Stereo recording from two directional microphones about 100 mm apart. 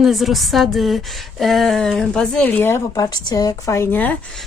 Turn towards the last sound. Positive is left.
turn(degrees=30)  # may be behind; listen again after turning